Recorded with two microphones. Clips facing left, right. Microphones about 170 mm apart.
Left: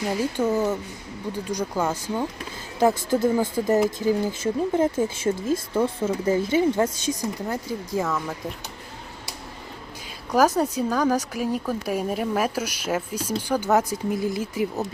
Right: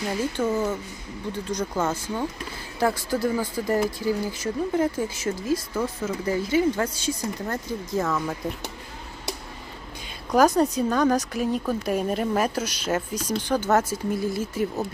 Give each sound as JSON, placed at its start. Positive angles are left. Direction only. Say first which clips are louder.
{"t": 0.2, "sound": "speech", "louder": "left 1 dB", "side_deg": 15}
{"t": 10.3, "sound": "speech", "louder": "right 1 dB", "side_deg": 5}